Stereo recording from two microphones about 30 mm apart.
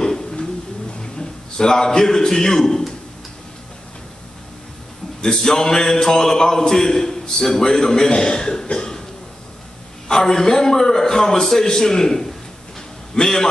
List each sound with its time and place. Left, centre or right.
0.0 s bird: centre
1.1 s a man's voice: left
5.2 s a man's voice: left
6.7 s a man's voice: centre
8.7 s cough: centre
10.0 s a man's voice: left